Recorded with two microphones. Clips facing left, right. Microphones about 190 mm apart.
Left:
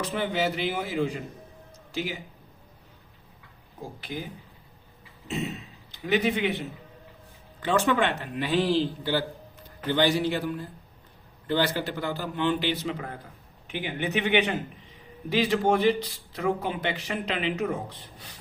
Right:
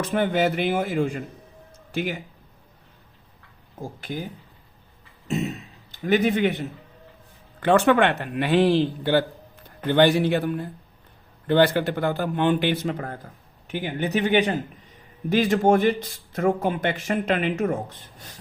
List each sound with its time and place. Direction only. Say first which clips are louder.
0.0 s a man's voice: right 5 dB; 50° right (ahead or behind)
5.9 s a man's voice: right 4 dB; 45° right (ahead or behind)
7.6 s a man's voice: right 6 dB; 60° right (ahead or behind)